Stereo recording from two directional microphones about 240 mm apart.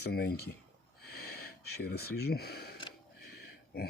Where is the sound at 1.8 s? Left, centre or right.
Left.